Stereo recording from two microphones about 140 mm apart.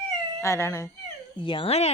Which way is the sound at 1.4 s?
40° left (ahead or behind).